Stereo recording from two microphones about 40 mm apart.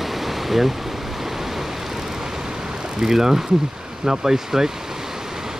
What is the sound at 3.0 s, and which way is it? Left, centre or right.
Speech, centre.